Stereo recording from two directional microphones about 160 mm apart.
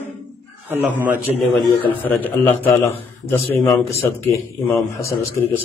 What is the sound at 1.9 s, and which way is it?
A man's voice, 10° left (ahead or behind).